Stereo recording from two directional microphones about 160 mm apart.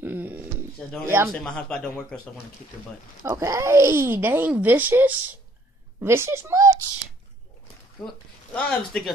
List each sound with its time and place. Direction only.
0.0 s a sound: 10° right (ahead or behind)
1.0 s speech: 15° right (ahead or behind)
1.3 s a man's voice: 5° left (ahead or behind)
3.3 s speech: 20° right (ahead or behind)
8.5 s a man's voice: 5° left (ahead or behind)